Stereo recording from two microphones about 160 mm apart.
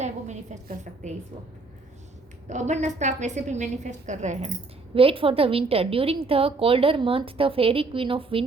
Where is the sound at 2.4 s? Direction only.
45° right (ahead or behind).